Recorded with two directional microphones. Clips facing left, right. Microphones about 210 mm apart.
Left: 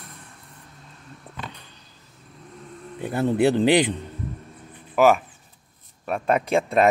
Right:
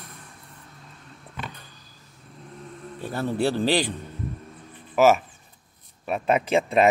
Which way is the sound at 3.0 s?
20° left (ahead or behind).